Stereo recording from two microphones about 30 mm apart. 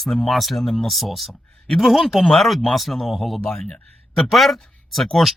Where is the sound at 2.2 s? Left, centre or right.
Centre.